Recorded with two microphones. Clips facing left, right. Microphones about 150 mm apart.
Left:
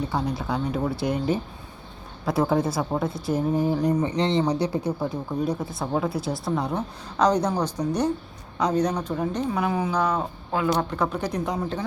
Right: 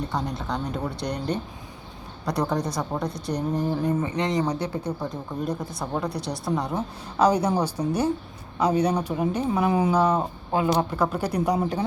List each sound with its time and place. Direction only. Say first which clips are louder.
0.1 s speech: left 2 dB; centre (ahead or behind)
4.0 s speech: left 2 dB; 30° left (ahead or behind)
4.4 s speech: left 3 dB; 10° left (ahead or behind); by 10.0 s 10° right (ahead or behind)
10.5 s speech: right 1 dB; 25° right (ahead or behind)
10.8 s speech: right 1 dB; 5° right (ahead or behind)